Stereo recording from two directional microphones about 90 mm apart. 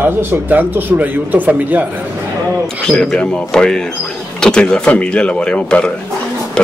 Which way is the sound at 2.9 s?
10° left (ahead or behind).